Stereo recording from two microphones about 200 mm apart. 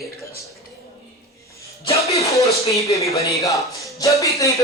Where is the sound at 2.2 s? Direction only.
15° left (ahead or behind).